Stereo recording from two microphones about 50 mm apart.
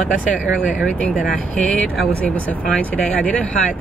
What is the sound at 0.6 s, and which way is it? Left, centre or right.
Speech, centre.